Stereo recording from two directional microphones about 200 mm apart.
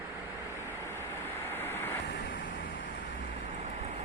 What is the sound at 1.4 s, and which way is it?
Vehicle, 10° left (ahead or behind).